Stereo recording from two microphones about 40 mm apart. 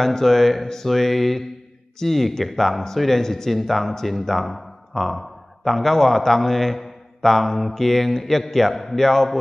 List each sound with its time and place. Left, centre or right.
0.0 s speech: centre